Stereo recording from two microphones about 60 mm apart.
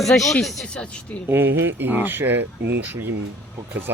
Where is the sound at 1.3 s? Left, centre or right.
Right.